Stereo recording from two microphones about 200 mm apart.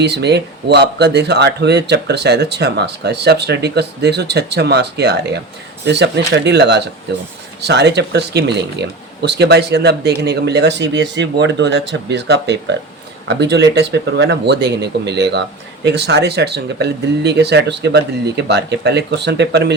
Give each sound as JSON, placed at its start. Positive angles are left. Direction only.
{"t": 0.0, "sound": "speech", "side_deg": -55}